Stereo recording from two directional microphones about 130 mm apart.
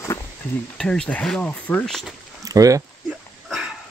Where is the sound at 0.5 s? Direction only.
5° left (ahead or behind).